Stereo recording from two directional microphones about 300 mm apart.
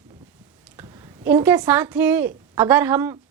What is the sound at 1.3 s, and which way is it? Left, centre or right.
A woman's voice, centre.